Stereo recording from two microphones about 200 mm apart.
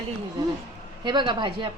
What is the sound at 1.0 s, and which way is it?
Speech, 20° right (ahead or behind).